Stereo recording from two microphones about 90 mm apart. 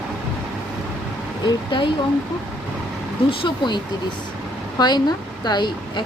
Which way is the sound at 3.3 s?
70° left (ahead or behind).